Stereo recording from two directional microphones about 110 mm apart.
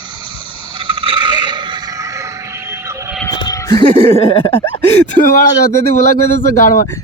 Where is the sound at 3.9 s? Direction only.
55° left (ahead or behind).